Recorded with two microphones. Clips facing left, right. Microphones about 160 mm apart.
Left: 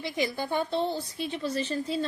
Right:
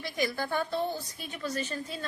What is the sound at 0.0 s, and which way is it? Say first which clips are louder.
A woman's voice: left 2 dB; 20° left (ahead or behind).